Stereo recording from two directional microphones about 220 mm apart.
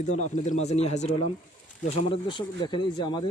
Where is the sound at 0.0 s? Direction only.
30° left (ahead or behind).